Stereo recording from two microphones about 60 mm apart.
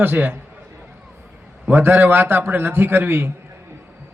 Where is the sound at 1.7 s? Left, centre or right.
Right.